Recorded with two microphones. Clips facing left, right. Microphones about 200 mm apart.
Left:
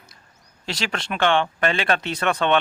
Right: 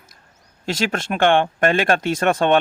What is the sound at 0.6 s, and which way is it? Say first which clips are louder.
Speech: right 6 dB; 45° right (ahead or behind).